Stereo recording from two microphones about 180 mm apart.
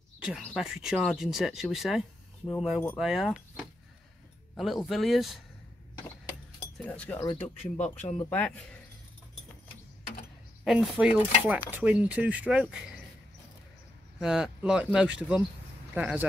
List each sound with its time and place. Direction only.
0.4 s speech: centre (ahead or behind)
6.9 s speech: 10° left (ahead or behind)
7.2 s speech: 30° left (ahead or behind)
8.3 s speech: 10° left (ahead or behind)
10.6 s speech: centre (ahead or behind)
14.2 s speech: 5° right (ahead or behind)